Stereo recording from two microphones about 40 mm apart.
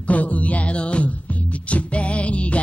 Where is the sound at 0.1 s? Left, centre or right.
Left.